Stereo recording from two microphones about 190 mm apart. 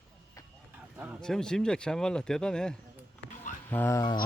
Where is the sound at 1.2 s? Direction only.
5° left (ahead or behind); by 4.2 s 20° left (ahead or behind).